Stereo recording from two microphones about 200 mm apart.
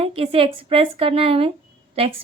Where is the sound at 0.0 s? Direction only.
30° right (ahead or behind).